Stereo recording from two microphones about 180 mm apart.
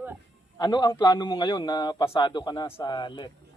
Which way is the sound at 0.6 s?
25° left (ahead or behind).